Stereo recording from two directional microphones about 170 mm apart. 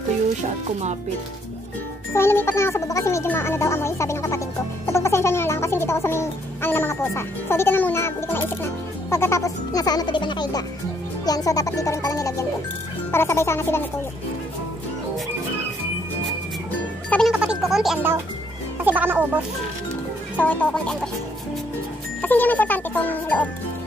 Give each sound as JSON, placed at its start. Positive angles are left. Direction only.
{"t": 2.1, "sound": "speech", "side_deg": 15}
{"t": 4.8, "sound": "music", "side_deg": 15}
{"t": 13.1, "sound": "speech", "side_deg": 15}
{"t": 17.1, "sound": "a sound", "side_deg": 0}
{"t": 18.8, "sound": "speech", "side_deg": -10}
{"t": 20.3, "sound": "speech", "side_deg": 10}
{"t": 22.2, "sound": "speech", "side_deg": 10}